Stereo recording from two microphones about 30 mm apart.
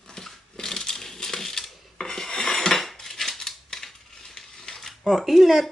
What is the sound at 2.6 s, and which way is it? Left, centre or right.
Cutlery, centre.